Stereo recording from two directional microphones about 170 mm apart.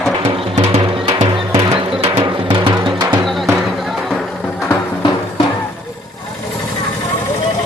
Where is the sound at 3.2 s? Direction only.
Centre (ahead or behind).